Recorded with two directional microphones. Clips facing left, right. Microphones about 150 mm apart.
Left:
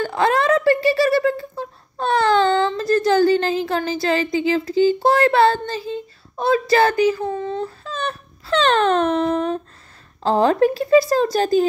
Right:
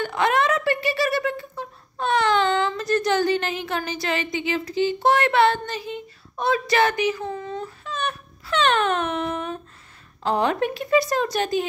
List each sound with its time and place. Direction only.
0.0 s speech: 30° left (ahead or behind)